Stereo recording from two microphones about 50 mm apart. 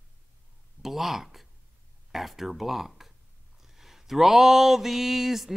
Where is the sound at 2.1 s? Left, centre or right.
Centre.